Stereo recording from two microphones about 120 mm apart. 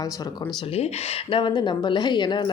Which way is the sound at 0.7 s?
55° left (ahead or behind).